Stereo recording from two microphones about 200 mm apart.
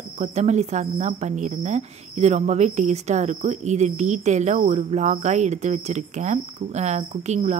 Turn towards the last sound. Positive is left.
turn(degrees=-35)  # may be behind; listen again after turning